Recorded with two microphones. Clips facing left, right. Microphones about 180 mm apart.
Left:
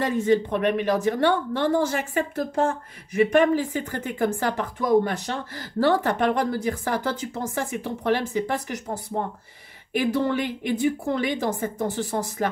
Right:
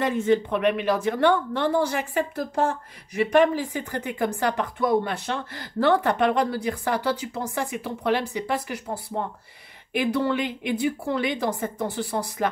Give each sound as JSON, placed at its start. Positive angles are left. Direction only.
{"t": 0.0, "sound": "a woman's voice", "side_deg": 40}